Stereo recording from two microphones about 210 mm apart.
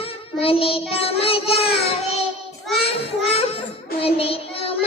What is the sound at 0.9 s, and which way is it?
Child singing, 25° left (ahead or behind).